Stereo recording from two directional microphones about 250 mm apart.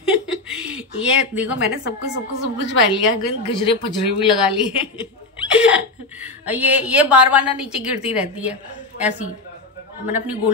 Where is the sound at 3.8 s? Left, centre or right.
Left.